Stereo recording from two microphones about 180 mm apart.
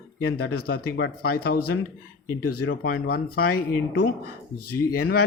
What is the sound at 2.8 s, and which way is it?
Speech, 55° left (ahead or behind).